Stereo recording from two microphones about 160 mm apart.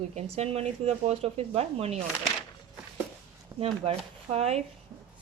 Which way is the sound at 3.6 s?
40° right (ahead or behind).